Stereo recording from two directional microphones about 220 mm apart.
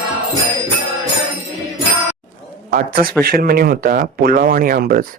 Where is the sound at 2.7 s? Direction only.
40° right (ahead or behind).